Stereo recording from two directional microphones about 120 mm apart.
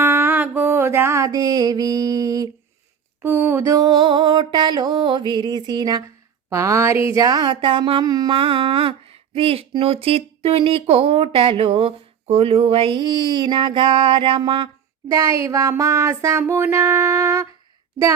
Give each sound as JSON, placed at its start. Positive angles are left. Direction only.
{"t": 0.0, "sound": "music", "side_deg": -15}
{"t": 3.2, "sound": "mantra", "side_deg": -15}
{"t": 8.3, "sound": "speech", "side_deg": -45}
{"t": 15.1, "sound": "music", "side_deg": -25}
{"t": 16.4, "sound": "a sound", "side_deg": -20}